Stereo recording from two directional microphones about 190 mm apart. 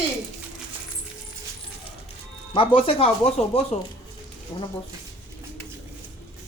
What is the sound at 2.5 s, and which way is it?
Speech, 30° left (ahead or behind).